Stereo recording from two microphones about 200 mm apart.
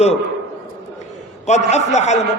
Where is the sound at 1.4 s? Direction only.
35° left (ahead or behind).